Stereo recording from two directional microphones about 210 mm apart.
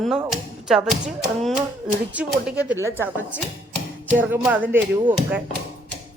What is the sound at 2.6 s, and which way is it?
A woman's voice, 10° right (ahead or behind).